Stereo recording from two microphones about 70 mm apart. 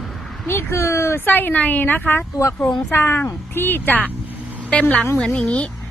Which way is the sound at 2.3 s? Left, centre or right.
Left.